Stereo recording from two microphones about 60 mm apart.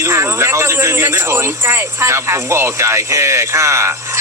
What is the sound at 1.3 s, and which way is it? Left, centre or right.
Speech, right.